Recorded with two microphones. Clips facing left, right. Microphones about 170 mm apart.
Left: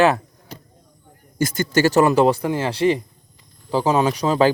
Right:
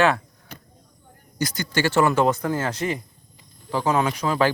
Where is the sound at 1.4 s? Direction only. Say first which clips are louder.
Left 6 dB; 50° left (ahead or behind); by 2.4 s 30° left (ahead or behind).